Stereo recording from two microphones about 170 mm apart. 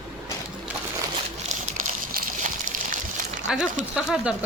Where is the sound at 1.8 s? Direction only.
50° right (ahead or behind).